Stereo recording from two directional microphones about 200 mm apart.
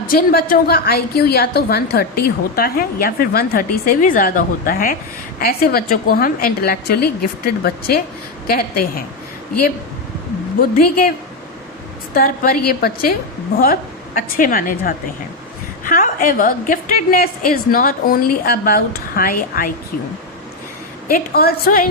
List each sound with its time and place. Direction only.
0.1 s a woman's voice: 45° left (ahead or behind)
10.6 s a woman's voice: 45° left (ahead or behind)
12.1 s a woman's voice: 45° left (ahead or behind)
21.1 s a woman's voice: 45° left (ahead or behind)